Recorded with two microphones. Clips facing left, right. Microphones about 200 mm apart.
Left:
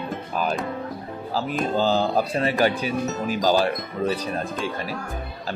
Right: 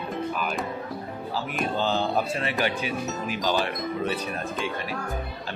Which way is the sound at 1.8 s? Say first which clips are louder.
Left 4 dB; 35° left (ahead or behind).